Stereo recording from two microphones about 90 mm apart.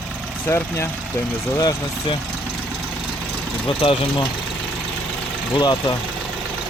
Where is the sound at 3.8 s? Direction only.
75° left (ahead or behind).